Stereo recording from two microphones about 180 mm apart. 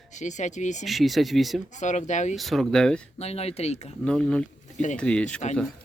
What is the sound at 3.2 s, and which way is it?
Speech, 35° left (ahead or behind).